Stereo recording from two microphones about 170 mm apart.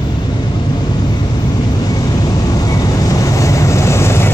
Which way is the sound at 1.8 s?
20° left (ahead or behind).